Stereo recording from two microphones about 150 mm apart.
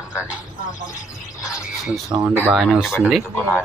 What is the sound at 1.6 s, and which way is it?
Speech, centre (ahead or behind).